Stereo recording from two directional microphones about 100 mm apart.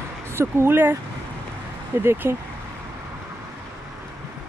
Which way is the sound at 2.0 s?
25° right (ahead or behind).